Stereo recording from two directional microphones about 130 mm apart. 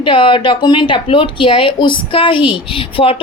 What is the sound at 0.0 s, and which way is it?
Speech, 40° left (ahead or behind).